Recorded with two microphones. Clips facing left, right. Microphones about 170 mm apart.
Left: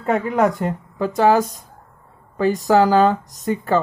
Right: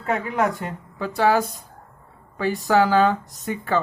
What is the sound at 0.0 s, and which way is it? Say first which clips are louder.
Speech: left 5 dB; 40° left (ahead or behind).